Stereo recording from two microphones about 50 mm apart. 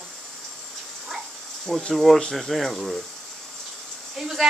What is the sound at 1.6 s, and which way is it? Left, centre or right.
Speech, centre.